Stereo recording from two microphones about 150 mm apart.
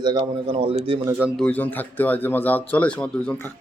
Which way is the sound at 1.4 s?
10° left (ahead or behind).